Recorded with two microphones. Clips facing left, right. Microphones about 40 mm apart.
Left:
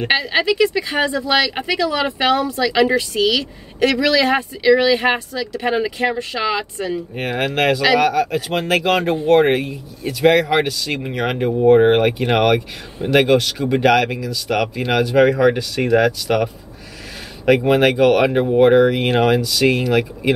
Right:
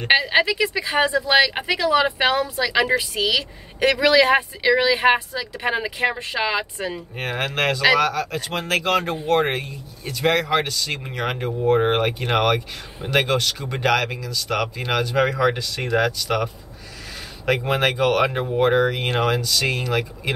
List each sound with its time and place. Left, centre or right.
0.1 s speech: centre
3.8 s speech: right
7.2 s speech: centre
17.6 s speech: centre